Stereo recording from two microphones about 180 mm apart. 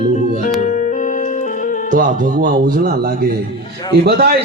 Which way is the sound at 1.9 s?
50° right (ahead or behind).